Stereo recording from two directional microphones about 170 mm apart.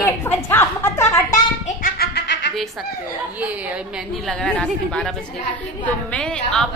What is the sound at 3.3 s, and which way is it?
A woman's voice, 10° right (ahead or behind).